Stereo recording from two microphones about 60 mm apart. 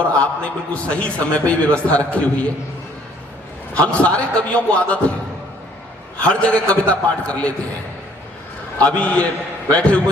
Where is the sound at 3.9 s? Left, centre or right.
Centre.